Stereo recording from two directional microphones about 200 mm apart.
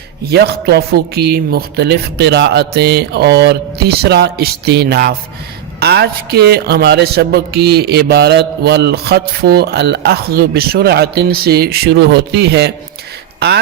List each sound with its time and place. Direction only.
0.3 s speech: 55° right (ahead or behind)